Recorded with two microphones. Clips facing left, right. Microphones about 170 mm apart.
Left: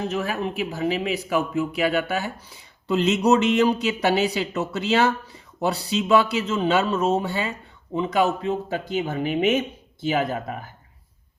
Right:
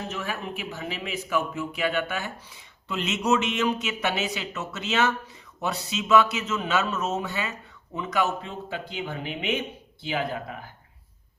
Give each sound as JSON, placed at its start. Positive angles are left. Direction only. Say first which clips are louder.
{"t": 0.1, "sound": "speech", "louder": "left 6 dB", "side_deg": 35}